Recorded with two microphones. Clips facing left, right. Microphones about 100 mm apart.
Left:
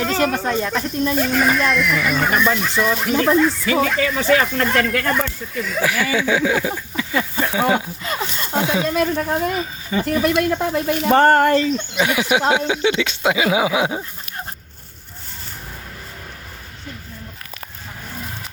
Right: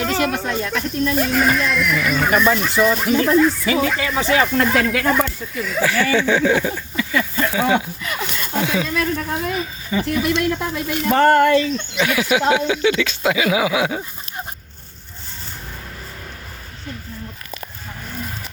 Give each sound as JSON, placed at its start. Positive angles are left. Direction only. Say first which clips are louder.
{"t": 0.0, "sound": "snake", "louder": "left 1 dB", "side_deg": 0}
{"t": 1.1, "sound": "speech", "louder": "even", "side_deg": 0}
{"t": 4.5, "sound": "speech", "louder": "right 1 dB", "side_deg": -5}
{"t": 5.8, "sound": "speech", "louder": "right 2 dB", "side_deg": 10}
{"t": 6.9, "sound": "a sound", "louder": "right 2 dB", "side_deg": 30}
{"t": 7.7, "sound": "speech", "louder": "even", "side_deg": 30}
{"t": 8.9, "sound": "speech", "louder": "left 3 dB", "side_deg": 45}
{"t": 11.9, "sound": "speech", "louder": "right 1 dB", "side_deg": 20}